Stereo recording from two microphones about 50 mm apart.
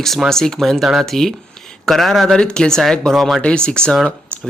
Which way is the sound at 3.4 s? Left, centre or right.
Centre.